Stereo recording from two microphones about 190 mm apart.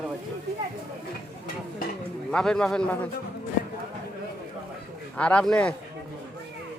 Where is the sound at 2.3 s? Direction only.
5° left (ahead or behind).